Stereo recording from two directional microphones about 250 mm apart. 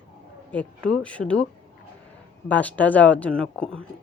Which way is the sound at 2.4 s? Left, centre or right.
Centre.